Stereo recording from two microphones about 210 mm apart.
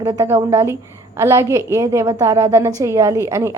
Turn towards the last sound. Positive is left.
turn(degrees=-15)  # may be behind; listen again after turning